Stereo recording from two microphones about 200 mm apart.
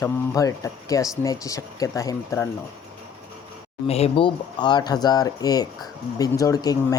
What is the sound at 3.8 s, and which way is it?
Speech, 30° left (ahead or behind).